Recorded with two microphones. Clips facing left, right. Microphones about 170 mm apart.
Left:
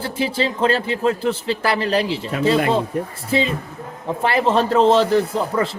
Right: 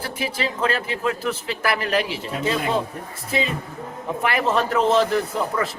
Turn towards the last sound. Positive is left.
turn(degrees=30)  # may be behind; listen again after turning